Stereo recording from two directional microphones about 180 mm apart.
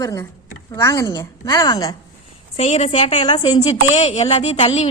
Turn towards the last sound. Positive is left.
turn(degrees=35)  # may be behind; listen again after turning